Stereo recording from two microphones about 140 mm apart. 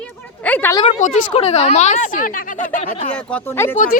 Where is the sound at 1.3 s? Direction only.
50° left (ahead or behind); by 2.3 s 65° left (ahead or behind).